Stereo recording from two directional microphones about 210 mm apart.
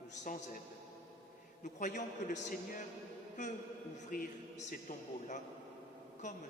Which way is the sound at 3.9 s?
40° left (ahead or behind).